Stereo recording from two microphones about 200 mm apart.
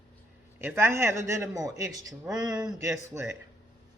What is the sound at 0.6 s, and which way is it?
A man's voice, 10° right (ahead or behind).